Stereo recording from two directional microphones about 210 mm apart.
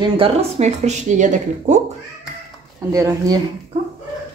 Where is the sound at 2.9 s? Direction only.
15° right (ahead or behind).